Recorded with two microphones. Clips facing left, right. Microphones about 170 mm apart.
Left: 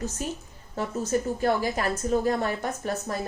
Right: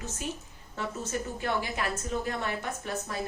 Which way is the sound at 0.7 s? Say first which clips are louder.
Left 7 dB; 40° left (ahead or behind).